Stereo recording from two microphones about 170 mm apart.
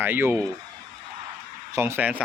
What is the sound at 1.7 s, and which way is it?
Speech, 15° right (ahead or behind).